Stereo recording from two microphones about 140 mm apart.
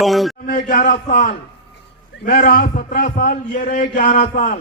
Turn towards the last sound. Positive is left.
turn(degrees=70)  # may be behind; listen again after turning